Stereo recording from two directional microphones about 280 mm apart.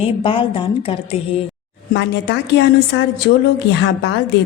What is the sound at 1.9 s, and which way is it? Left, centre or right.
Speech, left.